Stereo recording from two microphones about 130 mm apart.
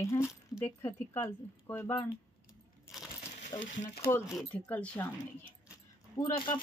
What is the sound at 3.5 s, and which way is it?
Speech, 25° left (ahead or behind).